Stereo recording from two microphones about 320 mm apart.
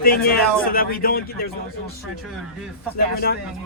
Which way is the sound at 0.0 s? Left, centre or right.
Left.